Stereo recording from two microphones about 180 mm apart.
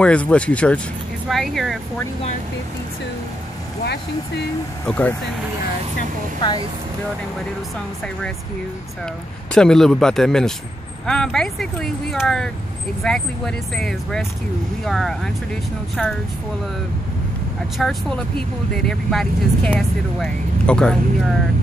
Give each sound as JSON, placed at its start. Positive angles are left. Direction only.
{"t": 0.0, "sound": "speech", "side_deg": 5}
{"t": 3.8, "sound": "speech", "side_deg": 65}
{"t": 4.8, "sound": "speech", "side_deg": 10}
{"t": 9.5, "sound": "speech", "side_deg": 5}
{"t": 17.7, "sound": "speech", "side_deg": 5}